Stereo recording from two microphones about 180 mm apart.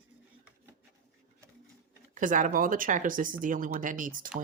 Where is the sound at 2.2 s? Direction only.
45° right (ahead or behind).